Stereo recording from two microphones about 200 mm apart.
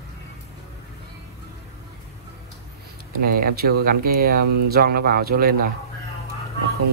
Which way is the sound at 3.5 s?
50° right (ahead or behind).